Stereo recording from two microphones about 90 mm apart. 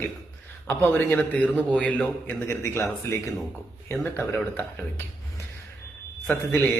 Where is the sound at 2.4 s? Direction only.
30° left (ahead or behind).